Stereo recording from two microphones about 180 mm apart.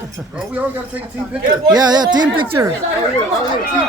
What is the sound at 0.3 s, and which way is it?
Speech, 10° right (ahead or behind).